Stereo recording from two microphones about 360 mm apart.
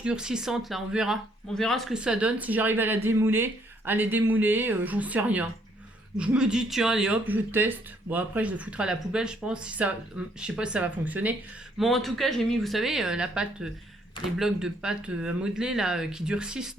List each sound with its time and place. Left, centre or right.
0.0 s speech: centre